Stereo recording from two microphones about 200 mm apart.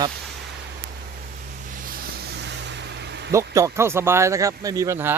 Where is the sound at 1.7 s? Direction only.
45° right (ahead or behind).